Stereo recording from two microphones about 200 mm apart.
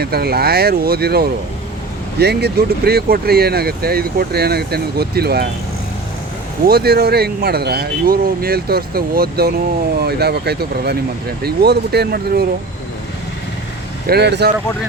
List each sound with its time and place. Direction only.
0.0 s speech: 50° right (ahead or behind)
6.7 s speech: 50° right (ahead or behind)
14.1 s speech: 55° right (ahead or behind)